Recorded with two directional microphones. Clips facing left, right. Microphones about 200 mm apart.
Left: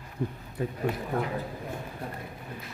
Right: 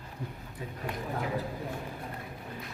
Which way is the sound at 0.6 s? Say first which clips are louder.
Left 10 dB; 70° left (ahead or behind).